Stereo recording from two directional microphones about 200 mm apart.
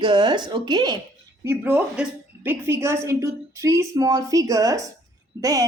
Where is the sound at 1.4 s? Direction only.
10° right (ahead or behind).